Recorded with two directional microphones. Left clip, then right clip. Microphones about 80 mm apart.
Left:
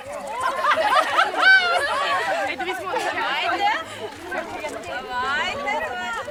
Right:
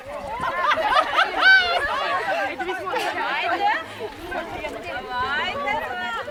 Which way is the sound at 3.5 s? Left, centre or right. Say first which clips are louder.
Even; centre.